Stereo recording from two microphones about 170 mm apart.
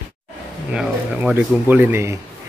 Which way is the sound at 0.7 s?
10° right (ahead or behind).